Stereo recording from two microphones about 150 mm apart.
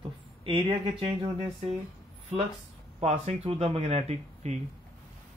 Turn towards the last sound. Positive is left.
turn(degrees=-45)  # may be behind; listen again after turning